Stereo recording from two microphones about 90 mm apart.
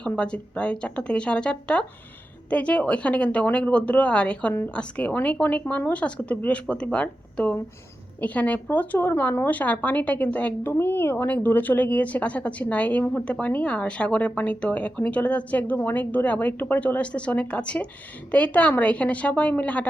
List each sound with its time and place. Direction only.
0.0 s speech: 10° left (ahead or behind)